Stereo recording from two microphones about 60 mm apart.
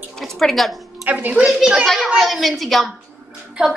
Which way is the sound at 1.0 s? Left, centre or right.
Right.